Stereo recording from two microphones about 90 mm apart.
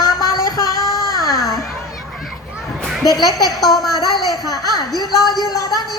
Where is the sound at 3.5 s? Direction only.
Centre (ahead or behind).